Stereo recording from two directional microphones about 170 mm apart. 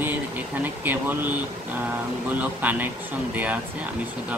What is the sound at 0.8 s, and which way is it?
Speech, 10° right (ahead or behind).